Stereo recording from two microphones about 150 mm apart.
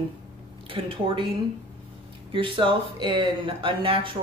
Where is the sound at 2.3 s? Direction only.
35° right (ahead or behind).